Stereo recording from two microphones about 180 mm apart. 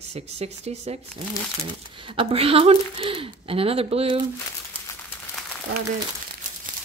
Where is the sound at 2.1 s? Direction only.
30° right (ahead or behind).